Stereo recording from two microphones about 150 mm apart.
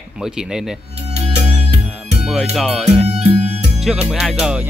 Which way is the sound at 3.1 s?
40° right (ahead or behind).